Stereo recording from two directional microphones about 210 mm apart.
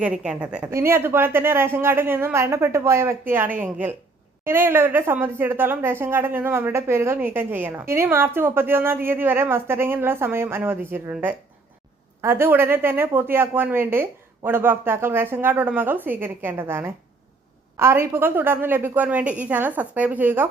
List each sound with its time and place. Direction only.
0.0 s speech: 5° right (ahead or behind)